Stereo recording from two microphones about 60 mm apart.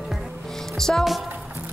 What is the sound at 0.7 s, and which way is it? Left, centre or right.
Speech, centre.